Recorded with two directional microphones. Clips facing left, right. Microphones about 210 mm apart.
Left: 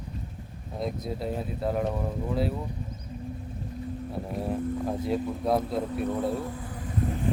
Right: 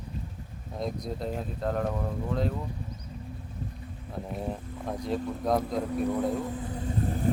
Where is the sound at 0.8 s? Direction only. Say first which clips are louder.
Left 1 dB; 5° left (ahead or behind).